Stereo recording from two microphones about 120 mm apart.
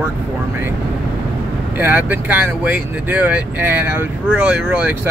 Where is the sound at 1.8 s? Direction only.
15° right (ahead or behind).